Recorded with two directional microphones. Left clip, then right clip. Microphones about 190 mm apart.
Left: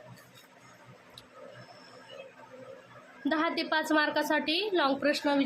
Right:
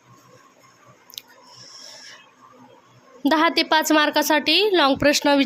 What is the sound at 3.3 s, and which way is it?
A woman's voice, 60° right (ahead or behind).